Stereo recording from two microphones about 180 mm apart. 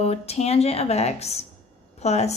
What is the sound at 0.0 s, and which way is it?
A woman's voice, 35° left (ahead or behind).